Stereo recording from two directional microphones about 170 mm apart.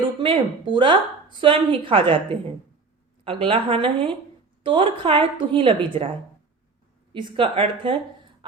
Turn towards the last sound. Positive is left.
turn(degrees=-30)  # may be behind; listen again after turning